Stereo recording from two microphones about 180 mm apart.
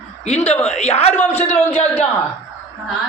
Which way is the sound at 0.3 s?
35° left (ahead or behind).